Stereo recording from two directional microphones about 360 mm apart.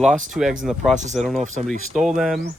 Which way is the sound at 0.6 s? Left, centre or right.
Centre.